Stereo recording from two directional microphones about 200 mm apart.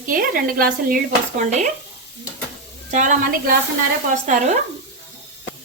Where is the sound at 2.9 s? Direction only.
40° right (ahead or behind).